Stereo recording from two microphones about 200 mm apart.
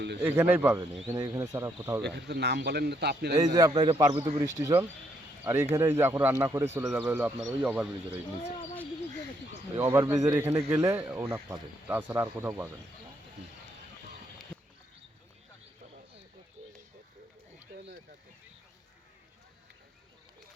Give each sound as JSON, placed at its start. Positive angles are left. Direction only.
{"t": 0.2, "sound": "speech", "side_deg": -10}
{"t": 2.0, "sound": "a man's voice", "side_deg": -55}
{"t": 3.3, "sound": "a man's voice", "side_deg": -20}
{"t": 4.2, "sound": "a man's voice", "side_deg": -15}
{"t": 9.7, "sound": "speech", "side_deg": -15}